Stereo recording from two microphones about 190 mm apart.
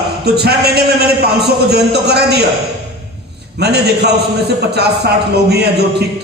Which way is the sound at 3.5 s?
60° right (ahead or behind).